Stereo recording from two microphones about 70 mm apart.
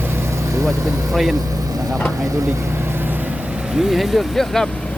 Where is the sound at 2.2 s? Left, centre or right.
Right.